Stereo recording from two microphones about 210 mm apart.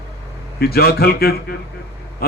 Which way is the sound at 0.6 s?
50° left (ahead or behind).